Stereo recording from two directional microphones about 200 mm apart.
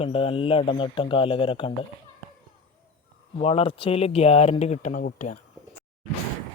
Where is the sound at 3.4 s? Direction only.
30° left (ahead or behind).